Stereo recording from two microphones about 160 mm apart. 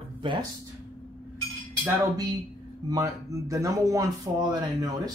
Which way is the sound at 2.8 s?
20° right (ahead or behind).